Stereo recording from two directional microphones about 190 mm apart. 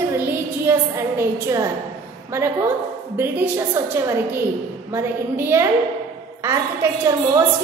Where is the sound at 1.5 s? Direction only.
15° right (ahead or behind).